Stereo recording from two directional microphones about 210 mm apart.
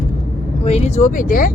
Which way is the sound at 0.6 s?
30° left (ahead or behind).